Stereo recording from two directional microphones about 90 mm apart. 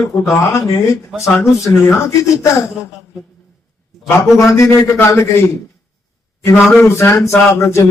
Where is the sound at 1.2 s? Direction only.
35° left (ahead or behind).